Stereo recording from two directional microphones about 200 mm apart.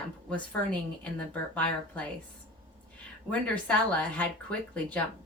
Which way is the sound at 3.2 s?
5° left (ahead or behind).